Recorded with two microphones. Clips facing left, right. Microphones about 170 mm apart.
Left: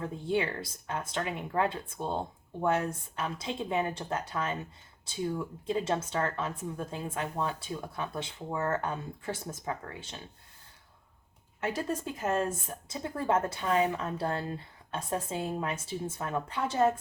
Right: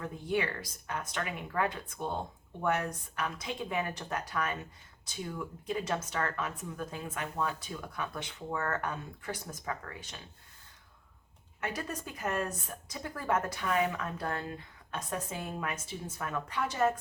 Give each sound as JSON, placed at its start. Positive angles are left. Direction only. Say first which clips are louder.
{"t": 0.0, "sound": "a woman's voice", "louder": "left 2 dB", "side_deg": 25}
{"t": 11.6, "sound": "a woman's voice", "louder": "left 5 dB", "side_deg": 25}